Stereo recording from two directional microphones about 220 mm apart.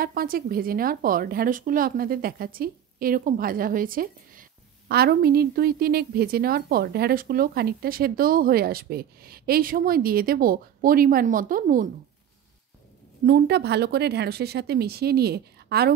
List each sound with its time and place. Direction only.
0.0 s a woman's voice: 40° right (ahead or behind)
13.2 s a woman's voice: 45° right (ahead or behind)